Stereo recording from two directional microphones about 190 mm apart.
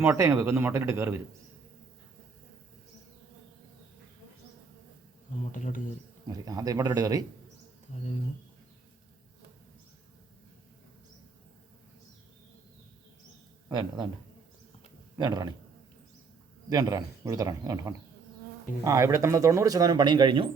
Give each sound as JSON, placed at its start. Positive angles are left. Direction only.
{"t": 0.0, "sound": "speech", "side_deg": -15}
{"t": 5.5, "sound": "speech", "side_deg": 45}
{"t": 6.2, "sound": "speech", "side_deg": -20}
{"t": 13.7, "sound": "speech", "side_deg": -20}
{"t": 15.2, "sound": "speech", "side_deg": -20}
{"t": 16.6, "sound": "speech", "side_deg": -20}